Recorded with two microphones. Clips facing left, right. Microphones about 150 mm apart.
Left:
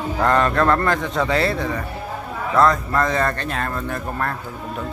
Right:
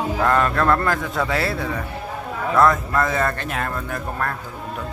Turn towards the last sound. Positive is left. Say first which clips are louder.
# left 1 dB
turn(degrees=-10)  # may be behind; listen again after turning